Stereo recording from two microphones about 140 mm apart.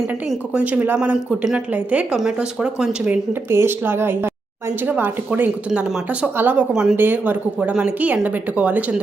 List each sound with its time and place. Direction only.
0.3 s speech: 10° right (ahead or behind)
3.5 s speech: 15° right (ahead or behind)